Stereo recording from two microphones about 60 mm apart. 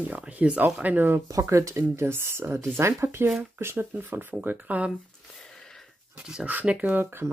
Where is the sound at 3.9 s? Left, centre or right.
Right.